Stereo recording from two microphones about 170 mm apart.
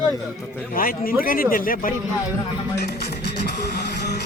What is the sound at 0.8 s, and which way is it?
Speech, 60° left (ahead or behind).